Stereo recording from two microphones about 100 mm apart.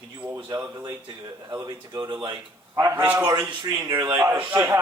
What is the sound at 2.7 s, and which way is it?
A man's voice, 30° right (ahead or behind).